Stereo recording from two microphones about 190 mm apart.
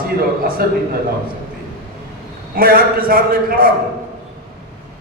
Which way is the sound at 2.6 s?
50° right (ahead or behind).